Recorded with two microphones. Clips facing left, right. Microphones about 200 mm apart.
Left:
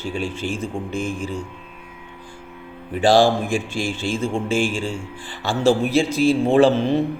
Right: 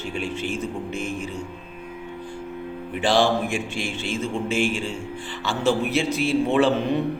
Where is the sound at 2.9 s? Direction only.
35° left (ahead or behind).